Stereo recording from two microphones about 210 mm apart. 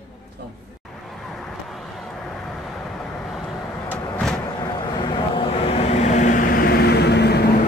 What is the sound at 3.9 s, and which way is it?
Vehicle, 5° left (ahead or behind).